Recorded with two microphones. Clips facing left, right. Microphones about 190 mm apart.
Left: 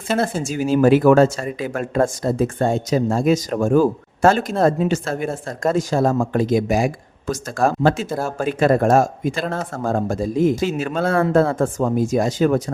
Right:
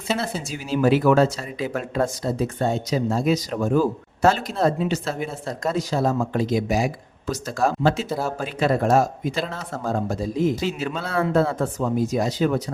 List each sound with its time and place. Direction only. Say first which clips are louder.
0.1 s speech: left 5 dB; 50° left (ahead or behind)